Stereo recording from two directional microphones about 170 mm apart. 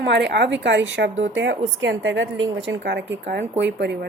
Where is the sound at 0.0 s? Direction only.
90° right.